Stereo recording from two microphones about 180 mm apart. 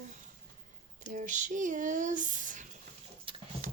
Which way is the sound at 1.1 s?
45° right (ahead or behind).